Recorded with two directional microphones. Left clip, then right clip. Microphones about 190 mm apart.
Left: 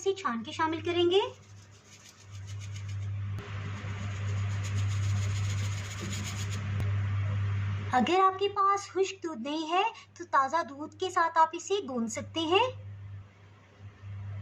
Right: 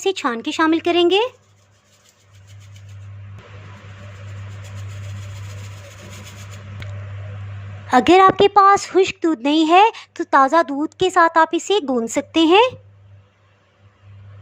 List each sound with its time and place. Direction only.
0.0 s speech: 55° right (ahead or behind)
7.9 s a woman's voice: 50° right (ahead or behind)